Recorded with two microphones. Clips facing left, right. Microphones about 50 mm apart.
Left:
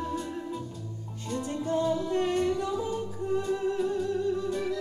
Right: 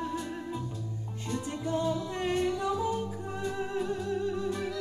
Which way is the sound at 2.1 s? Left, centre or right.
Right.